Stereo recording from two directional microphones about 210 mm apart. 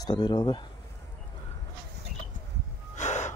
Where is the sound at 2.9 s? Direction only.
35° left (ahead or behind).